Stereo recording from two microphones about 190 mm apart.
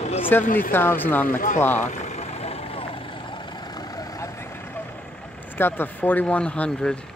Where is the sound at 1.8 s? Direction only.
40° left (ahead or behind); by 4.8 s 10° left (ahead or behind).